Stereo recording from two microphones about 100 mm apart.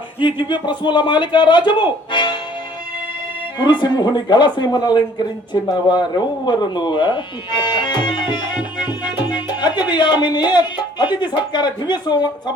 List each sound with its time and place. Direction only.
0.2 s speech: 55° left (ahead or behind)
3.6 s speech: 50° left (ahead or behind)